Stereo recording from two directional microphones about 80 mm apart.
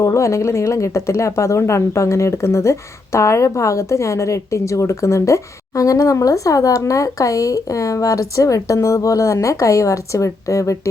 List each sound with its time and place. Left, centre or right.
0.0 s speech: left